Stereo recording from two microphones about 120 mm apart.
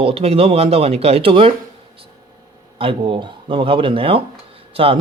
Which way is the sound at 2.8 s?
45° right (ahead or behind).